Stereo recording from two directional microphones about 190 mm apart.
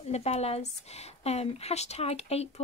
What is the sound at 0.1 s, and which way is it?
Speech, 35° left (ahead or behind).